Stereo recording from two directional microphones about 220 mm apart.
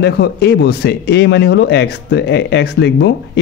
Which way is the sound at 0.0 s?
45° left (ahead or behind).